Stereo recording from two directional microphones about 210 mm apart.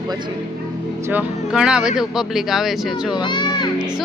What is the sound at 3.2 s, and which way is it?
Speech, 20° left (ahead or behind).